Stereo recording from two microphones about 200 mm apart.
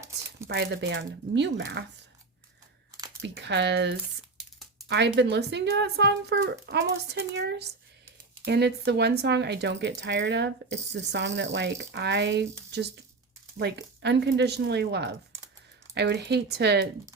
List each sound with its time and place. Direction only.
0.4 s speech: 60° right (ahead or behind)
3.2 s speech: 60° right (ahead or behind)